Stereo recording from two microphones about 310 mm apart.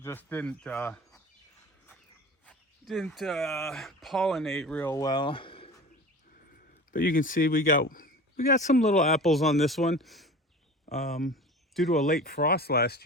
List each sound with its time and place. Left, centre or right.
0.0 s speech: centre
2.5 s speech: centre
6.9 s speech: left
9.0 s speech: centre
11.3 s a sound: centre
12.2 s speech: left